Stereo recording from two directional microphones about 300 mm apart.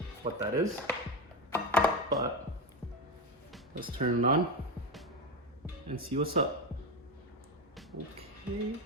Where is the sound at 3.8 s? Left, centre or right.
Right.